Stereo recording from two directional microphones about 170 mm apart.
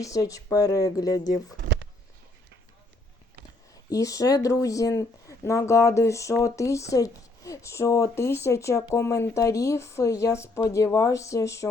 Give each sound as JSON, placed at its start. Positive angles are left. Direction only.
{"t": 0.0, "sound": "speech", "side_deg": 20}
{"t": 3.8, "sound": "speech", "side_deg": 20}